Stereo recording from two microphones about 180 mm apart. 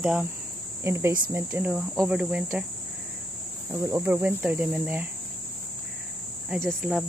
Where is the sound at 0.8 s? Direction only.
15° right (ahead or behind).